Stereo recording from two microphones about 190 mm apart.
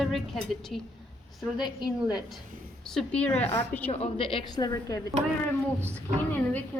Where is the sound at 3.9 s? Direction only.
30° left (ahead or behind).